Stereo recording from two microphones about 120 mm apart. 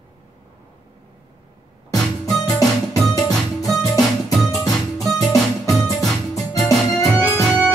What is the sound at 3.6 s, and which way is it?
Music, centre (ahead or behind).